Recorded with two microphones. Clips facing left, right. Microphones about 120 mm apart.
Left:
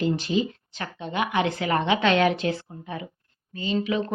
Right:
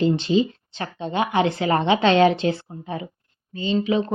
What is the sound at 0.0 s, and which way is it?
Speech, 25° right (ahead or behind).